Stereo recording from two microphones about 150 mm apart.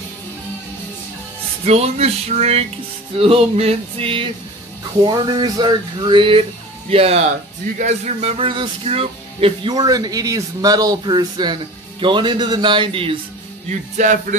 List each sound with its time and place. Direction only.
1.7 s a sound: 45° right (ahead or behind)
3.2 s speech: 40° right (ahead or behind)
13.7 s music: 55° right (ahead or behind)